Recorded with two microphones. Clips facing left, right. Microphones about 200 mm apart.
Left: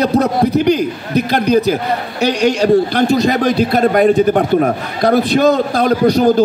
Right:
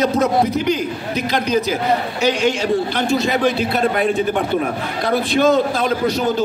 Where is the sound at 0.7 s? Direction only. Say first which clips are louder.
Left 6 dB; 60° left (ahead or behind).